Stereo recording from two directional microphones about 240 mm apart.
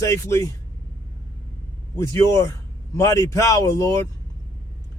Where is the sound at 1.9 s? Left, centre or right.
Centre.